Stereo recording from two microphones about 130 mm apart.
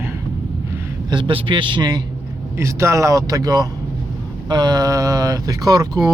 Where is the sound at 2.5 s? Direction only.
20° right (ahead or behind).